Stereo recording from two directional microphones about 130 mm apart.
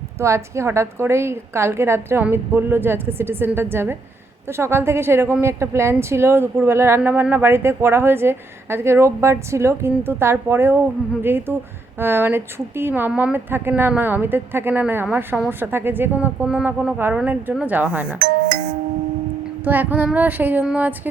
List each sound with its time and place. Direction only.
0.2 s a woman's voice: 20° right (ahead or behind)
19.6 s a woman's voice: 15° right (ahead or behind)